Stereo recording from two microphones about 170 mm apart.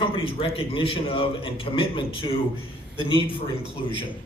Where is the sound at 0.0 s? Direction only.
30° left (ahead or behind).